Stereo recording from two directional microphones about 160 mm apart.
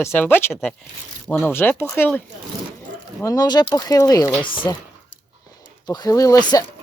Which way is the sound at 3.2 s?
25° left (ahead or behind).